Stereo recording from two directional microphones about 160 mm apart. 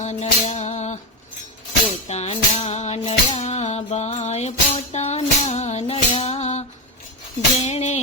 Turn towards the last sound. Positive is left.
turn(degrees=45)  # may be behind; listen again after turning